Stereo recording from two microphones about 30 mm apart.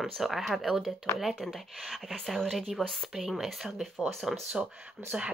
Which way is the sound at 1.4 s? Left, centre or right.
Centre.